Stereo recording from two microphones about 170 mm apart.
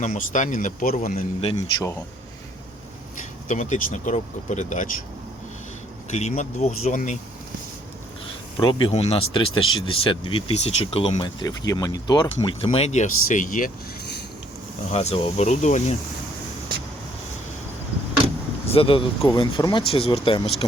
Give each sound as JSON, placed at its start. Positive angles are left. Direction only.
{"t": 0.0, "sound": "speech", "side_deg": 45}
{"t": 3.2, "sound": "speech", "side_deg": 45}
{"t": 6.1, "sound": "speech", "side_deg": 45}
{"t": 8.5, "sound": "speech", "side_deg": 25}
{"t": 14.8, "sound": "speech", "side_deg": 40}
{"t": 18.7, "sound": "speech", "side_deg": 30}